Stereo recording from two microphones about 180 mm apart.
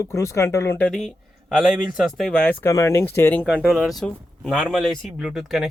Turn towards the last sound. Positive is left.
turn(degrees=0)  # may be behind; listen again after turning